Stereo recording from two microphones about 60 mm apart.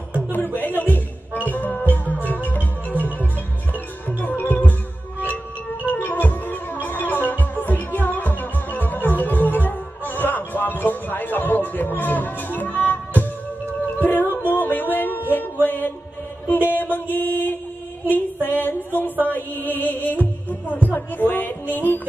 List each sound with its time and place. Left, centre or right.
0.7 s music: left
3.7 s music: left
18.1 s a sound: left
19.2 s music: left